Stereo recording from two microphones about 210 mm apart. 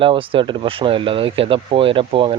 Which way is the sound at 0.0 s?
25° right (ahead or behind).